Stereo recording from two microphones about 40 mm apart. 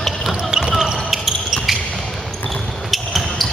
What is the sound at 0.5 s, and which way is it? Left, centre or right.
Basketball bounce, centre.